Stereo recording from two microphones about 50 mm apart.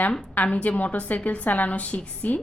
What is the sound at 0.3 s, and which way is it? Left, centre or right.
A woman's voice, left.